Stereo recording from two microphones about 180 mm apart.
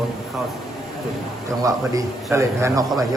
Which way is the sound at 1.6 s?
15° right (ahead or behind).